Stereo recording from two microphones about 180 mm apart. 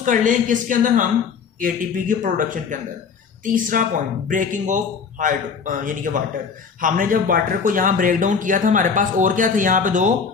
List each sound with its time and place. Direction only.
0.0 s speech: 45° right (ahead or behind)